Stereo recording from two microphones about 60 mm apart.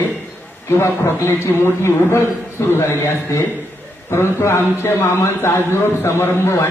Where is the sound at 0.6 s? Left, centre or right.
Left.